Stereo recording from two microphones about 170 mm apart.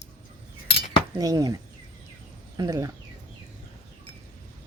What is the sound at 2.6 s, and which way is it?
Speech, 20° right (ahead or behind).